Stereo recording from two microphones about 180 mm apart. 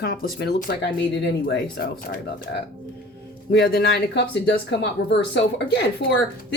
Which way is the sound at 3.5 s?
65° left (ahead or behind).